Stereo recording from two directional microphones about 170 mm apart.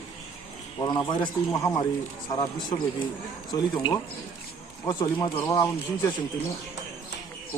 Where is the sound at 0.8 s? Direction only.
25° left (ahead or behind).